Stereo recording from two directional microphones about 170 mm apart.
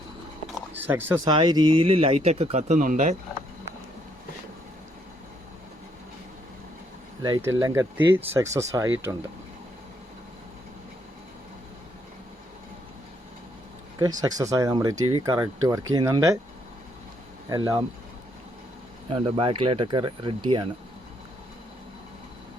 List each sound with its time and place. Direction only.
0.7 s speech: 10° right (ahead or behind)
1.3 s speech: 25° right (ahead or behind); by 3.2 s 50° right (ahead or behind)
7.2 s speech: 20° right (ahead or behind)
14.2 s speech: 20° right (ahead or behind)
15.2 s speech: 20° right (ahead or behind)
17.5 s speech: 20° right (ahead or behind)
19.1 s speech: 30° right (ahead or behind)